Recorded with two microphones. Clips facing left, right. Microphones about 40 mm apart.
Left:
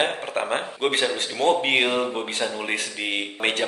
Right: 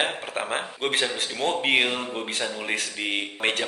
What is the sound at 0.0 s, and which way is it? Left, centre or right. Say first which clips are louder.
A man's voice: left 3 dB; centre.